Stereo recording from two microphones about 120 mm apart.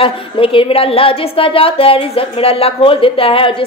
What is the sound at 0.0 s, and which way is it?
A woman's voice, 50° left (ahead or behind).